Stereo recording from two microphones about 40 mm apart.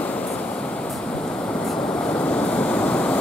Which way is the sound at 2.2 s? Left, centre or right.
Left.